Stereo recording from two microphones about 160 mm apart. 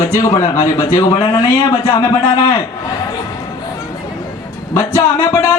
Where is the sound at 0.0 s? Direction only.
20° left (ahead or behind).